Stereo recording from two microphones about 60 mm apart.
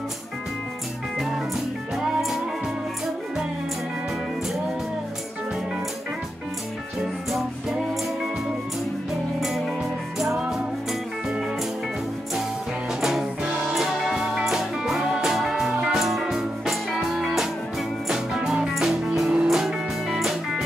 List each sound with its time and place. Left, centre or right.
2.0 s music: centre
9.4 s music: centre
13.0 s music: centre